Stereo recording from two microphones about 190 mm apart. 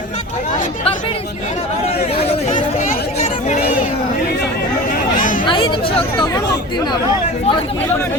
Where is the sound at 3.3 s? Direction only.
40° left (ahead or behind).